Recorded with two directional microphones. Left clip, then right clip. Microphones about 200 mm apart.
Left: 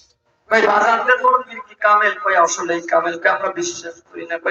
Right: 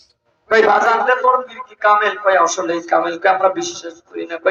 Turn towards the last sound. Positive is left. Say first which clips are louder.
# right 4 dB
turn(degrees=-35)  # may be behind; listen again after turning